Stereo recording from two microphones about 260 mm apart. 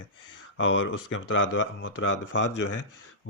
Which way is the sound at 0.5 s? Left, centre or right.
Left.